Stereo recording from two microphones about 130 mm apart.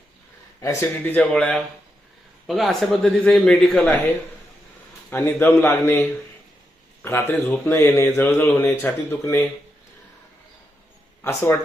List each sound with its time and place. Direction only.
0.6 s a man's voice: 20° left (ahead or behind)
5.1 s speech: 15° left (ahead or behind)
11.2 s speech: 20° left (ahead or behind)